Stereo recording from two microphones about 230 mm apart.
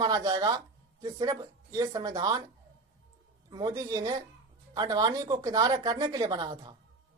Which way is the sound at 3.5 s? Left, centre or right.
Centre.